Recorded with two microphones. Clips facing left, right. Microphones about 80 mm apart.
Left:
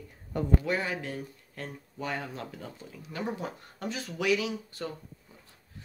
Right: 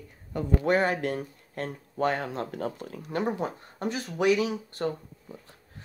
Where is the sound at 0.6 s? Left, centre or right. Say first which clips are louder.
Right 7 dB; right.